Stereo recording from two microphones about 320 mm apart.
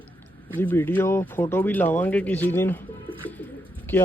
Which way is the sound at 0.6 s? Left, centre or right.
Centre.